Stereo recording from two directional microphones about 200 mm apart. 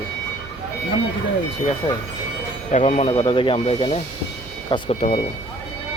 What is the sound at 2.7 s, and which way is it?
Speech, 35° left (ahead or behind).